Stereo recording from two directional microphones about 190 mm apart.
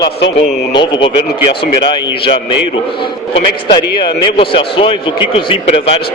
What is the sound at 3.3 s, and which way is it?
A man's voice, 25° left (ahead or behind).